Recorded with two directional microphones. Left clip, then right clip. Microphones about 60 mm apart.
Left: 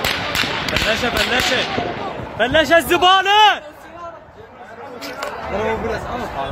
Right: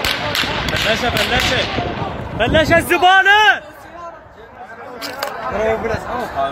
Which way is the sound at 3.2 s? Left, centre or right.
Left.